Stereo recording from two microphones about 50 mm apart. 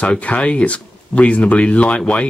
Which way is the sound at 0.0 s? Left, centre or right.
Left.